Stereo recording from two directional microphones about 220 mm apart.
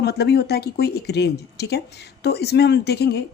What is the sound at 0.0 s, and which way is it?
A woman's voice, 45° left (ahead or behind).